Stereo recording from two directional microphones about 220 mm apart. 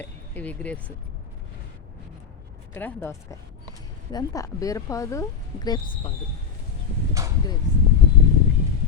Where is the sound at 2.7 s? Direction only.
10° left (ahead or behind).